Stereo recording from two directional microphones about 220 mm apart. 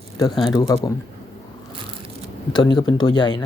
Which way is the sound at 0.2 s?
20° left (ahead or behind).